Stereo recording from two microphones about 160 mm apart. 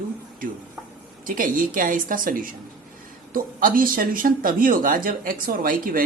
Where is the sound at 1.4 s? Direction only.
60° right (ahead or behind).